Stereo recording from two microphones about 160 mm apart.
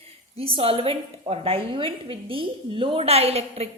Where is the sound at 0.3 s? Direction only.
35° right (ahead or behind).